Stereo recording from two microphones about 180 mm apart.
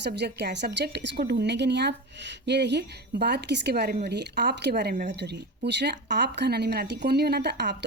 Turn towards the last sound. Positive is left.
turn(degrees=-70)  # may be behind; listen again after turning